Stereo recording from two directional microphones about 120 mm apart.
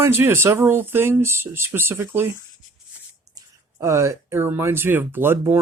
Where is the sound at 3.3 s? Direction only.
25° right (ahead or behind).